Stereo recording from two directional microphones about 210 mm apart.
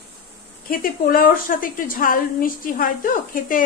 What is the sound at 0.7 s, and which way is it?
A woman's voice, 45° left (ahead or behind).